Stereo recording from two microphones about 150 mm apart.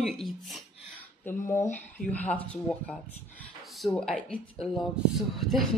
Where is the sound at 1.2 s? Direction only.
15° left (ahead or behind).